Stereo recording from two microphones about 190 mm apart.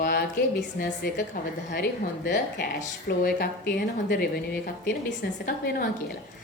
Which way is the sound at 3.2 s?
55° left (ahead or behind).